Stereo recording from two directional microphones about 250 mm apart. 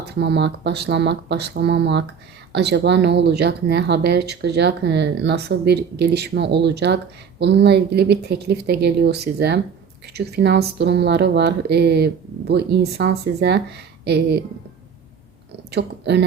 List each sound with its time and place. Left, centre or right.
0.0 s speech: right
15.7 s speech: right